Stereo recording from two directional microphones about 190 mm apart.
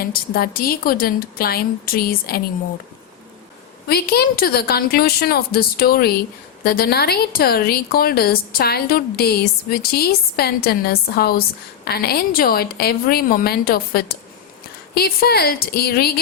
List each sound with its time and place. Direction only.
0.0 s a woman's voice: 50° left (ahead or behind)
3.8 s a woman's voice: 55° left (ahead or behind)